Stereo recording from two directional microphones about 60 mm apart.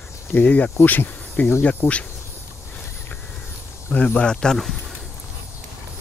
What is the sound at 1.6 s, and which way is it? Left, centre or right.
Speech, left.